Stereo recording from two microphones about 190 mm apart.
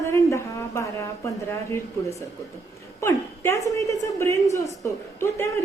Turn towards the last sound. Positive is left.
turn(degrees=15)  # may be behind; listen again after turning